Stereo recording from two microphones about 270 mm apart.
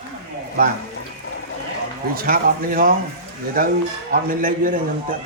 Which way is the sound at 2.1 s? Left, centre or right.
Right.